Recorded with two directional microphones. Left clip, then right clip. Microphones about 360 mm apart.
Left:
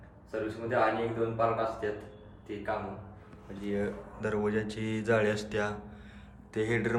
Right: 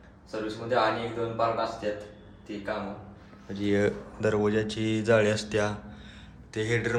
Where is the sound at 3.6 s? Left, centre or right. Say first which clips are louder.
Right 8 dB; right.